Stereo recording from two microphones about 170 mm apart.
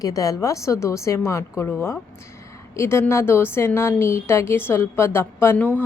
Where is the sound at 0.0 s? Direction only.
20° left (ahead or behind).